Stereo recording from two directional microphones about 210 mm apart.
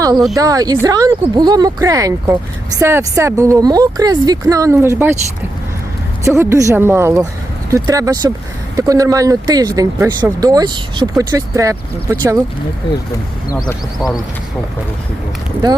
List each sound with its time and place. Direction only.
0.3 s speech: 15° right (ahead or behind)
6.2 s speech: 15° right (ahead or behind)
13.5 s speech: 15° left (ahead or behind)